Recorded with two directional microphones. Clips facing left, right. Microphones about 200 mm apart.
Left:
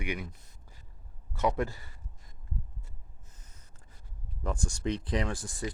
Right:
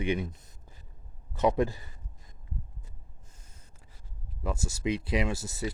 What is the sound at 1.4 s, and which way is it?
Speech, 20° right (ahead or behind).